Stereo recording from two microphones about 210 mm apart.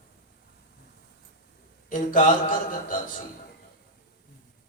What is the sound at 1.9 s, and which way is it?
A man's voice, 40° left (ahead or behind).